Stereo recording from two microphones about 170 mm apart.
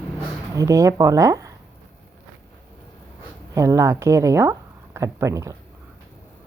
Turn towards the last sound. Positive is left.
turn(degrees=-20)  # may be behind; listen again after turning